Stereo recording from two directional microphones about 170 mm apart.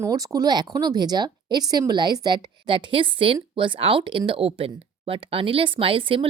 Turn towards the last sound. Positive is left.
turn(degrees=-30)  # may be behind; listen again after turning